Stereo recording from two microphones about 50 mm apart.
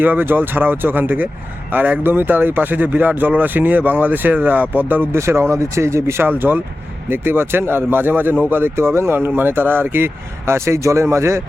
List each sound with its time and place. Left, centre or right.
0.0 s speech: right
5.1 s speech: right
6.2 s speech: right